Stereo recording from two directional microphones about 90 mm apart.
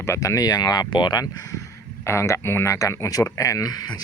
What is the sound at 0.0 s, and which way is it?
Speech, 35° left (ahead or behind).